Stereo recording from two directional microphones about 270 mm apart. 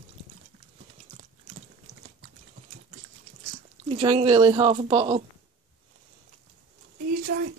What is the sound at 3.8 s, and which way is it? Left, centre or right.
Speech, centre.